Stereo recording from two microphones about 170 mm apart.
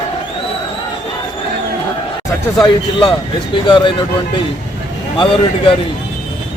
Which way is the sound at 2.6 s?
25° left (ahead or behind).